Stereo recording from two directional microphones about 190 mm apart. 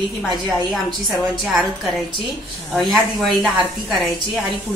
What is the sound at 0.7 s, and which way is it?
A woman's voice, centre (ahead or behind).